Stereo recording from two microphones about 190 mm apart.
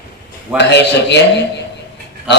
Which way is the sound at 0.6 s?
65° left (ahead or behind).